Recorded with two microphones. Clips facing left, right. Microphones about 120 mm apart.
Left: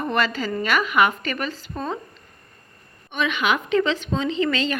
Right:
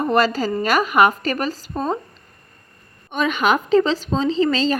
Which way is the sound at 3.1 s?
40° right (ahead or behind).